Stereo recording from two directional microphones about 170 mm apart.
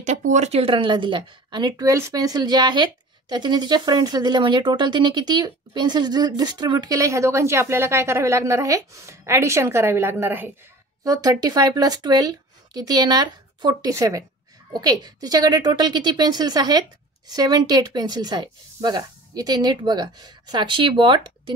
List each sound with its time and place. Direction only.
0.0 s a woman's voice: 45° right (ahead or behind); by 21.5 s 30° right (ahead or behind)